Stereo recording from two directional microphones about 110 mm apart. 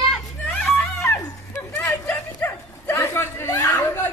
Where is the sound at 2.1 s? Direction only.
15° left (ahead or behind).